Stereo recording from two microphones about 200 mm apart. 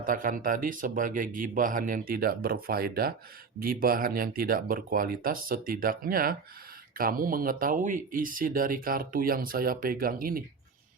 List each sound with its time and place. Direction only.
0.0 s speech: 45° right (ahead or behind)